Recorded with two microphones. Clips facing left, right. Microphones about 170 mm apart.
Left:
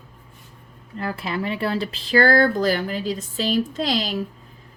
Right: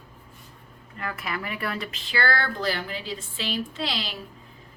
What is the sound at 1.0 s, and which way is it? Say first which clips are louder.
Speech: left 6 dB; 30° left (ahead or behind).